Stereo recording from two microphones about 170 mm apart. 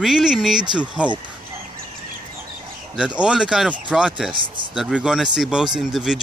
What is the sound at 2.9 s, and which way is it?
Speech, 5° right (ahead or behind).